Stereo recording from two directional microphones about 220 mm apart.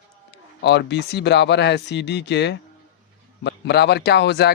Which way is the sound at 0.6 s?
50° left (ahead or behind).